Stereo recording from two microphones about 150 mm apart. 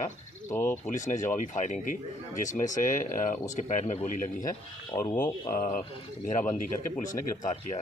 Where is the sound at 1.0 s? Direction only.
55° left (ahead or behind).